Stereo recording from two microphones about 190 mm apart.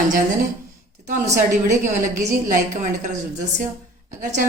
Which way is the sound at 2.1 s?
45° right (ahead or behind).